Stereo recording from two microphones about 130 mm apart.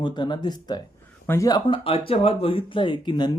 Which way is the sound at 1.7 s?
45° left (ahead or behind).